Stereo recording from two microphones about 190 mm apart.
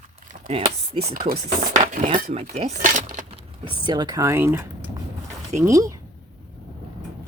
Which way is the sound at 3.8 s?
20° right (ahead or behind).